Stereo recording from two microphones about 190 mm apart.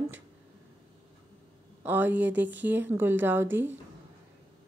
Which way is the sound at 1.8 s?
10° right (ahead or behind).